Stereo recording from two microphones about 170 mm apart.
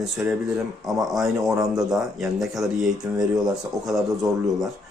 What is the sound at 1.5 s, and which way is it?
Speech, 20° right (ahead or behind).